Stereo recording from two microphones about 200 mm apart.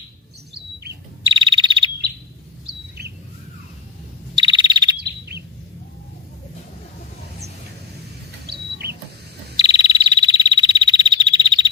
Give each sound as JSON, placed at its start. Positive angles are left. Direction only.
{"t": 1.2, "sound": "frog", "side_deg": -25}
{"t": 3.0, "sound": "chirp", "side_deg": -55}
{"t": 4.4, "sound": "bird vocalization", "side_deg": -20}
{"t": 8.4, "sound": "a sound", "side_deg": -55}
{"t": 9.6, "sound": "frog", "side_deg": -20}